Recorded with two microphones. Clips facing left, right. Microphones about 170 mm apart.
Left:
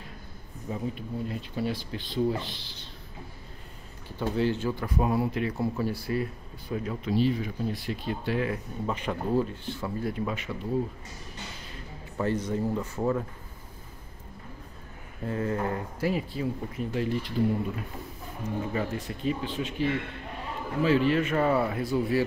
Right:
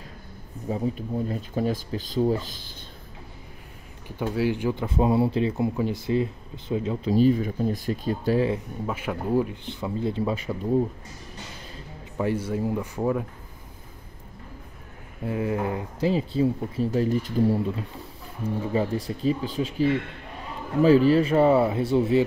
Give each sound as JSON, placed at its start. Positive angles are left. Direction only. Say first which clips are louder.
{"t": 0.7, "sound": "speech", "louder": "right 6 dB", "side_deg": -35}
{"t": 4.2, "sound": "speech", "louder": "right 2 dB", "side_deg": -10}
{"t": 7.1, "sound": "speech", "louder": "right 6 dB", "side_deg": -45}
{"t": 8.8, "sound": "speech", "louder": "even", "side_deg": -5}
{"t": 12.2, "sound": "speech", "louder": "right 2 dB", "side_deg": -10}
{"t": 15.2, "sound": "speech", "louder": "right 3 dB", "side_deg": -15}
{"t": 16.1, "sound": "speech", "louder": "right 7 dB", "side_deg": -30}
{"t": 18.4, "sound": "speech", "louder": "right 5 dB", "side_deg": -30}